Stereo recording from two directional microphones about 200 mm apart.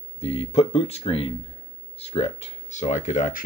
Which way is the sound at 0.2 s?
30° left (ahead or behind).